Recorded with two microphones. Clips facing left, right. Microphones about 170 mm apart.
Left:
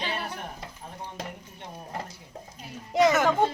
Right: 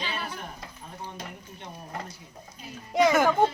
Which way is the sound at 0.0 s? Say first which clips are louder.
Left 2 dB; 60° left (ahead or behind).